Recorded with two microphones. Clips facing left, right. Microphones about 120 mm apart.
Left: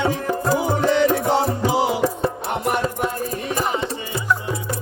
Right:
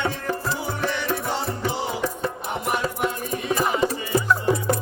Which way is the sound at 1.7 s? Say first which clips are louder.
Left 8 dB; 90° left.